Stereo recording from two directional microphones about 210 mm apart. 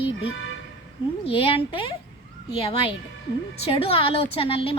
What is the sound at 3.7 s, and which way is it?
A woman's voice, 25° left (ahead or behind).